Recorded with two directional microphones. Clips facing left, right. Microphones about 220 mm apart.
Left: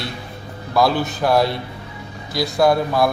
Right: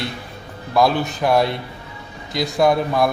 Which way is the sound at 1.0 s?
Centre (ahead or behind).